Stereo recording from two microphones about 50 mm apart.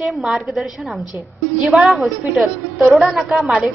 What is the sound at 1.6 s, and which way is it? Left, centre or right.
A woman's voice, centre.